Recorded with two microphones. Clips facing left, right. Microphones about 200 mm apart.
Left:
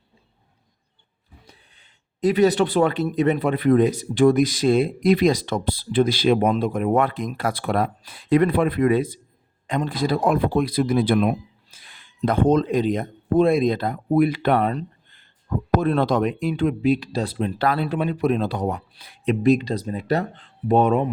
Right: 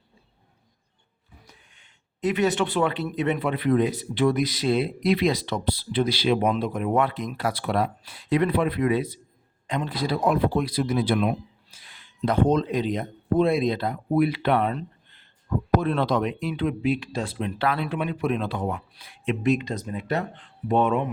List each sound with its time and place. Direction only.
1.5 s speech: 35° left (ahead or behind)